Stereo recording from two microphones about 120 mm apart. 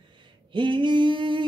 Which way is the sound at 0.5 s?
40° right (ahead or behind).